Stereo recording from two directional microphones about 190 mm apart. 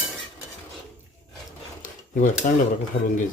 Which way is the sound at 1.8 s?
45° left (ahead or behind).